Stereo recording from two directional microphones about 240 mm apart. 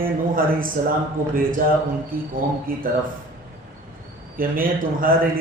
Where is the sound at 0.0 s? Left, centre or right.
Right.